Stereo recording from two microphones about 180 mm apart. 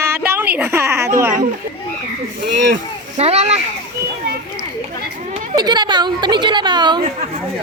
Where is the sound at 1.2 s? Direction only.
10° right (ahead or behind).